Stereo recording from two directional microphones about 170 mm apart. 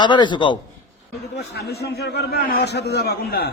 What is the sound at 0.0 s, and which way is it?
Speech, 25° left (ahead or behind).